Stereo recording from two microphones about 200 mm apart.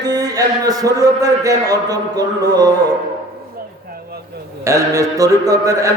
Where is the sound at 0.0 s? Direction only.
20° right (ahead or behind).